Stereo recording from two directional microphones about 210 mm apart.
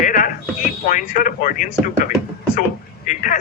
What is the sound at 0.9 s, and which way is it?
Speech, 40° left (ahead or behind).